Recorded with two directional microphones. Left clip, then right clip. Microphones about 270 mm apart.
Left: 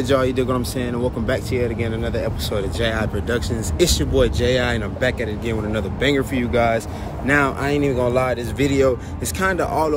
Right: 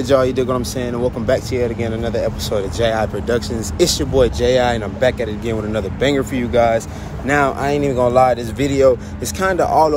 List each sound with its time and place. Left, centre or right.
0.0 s speech: centre